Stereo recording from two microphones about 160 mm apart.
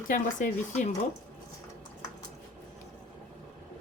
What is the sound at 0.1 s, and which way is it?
Speech, 50° left (ahead or behind).